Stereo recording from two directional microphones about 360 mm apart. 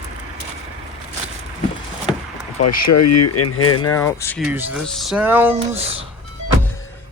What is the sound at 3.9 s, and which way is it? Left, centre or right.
Speech, centre.